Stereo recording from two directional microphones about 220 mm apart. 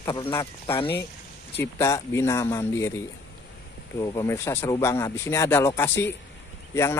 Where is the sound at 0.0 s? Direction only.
20° left (ahead or behind).